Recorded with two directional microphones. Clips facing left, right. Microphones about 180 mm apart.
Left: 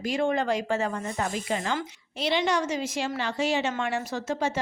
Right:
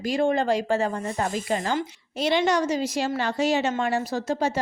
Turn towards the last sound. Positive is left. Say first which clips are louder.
# right 3 dB
turn(degrees=-35)  # may be behind; listen again after turning